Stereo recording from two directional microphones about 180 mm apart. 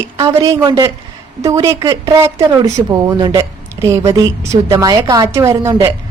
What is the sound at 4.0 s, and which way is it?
Speech, 30° right (ahead or behind).